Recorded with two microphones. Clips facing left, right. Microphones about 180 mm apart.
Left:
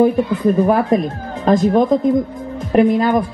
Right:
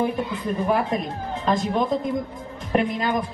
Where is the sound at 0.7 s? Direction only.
45° left (ahead or behind).